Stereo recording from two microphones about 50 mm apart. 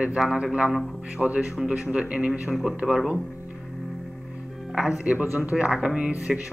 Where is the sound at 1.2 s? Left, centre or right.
Right.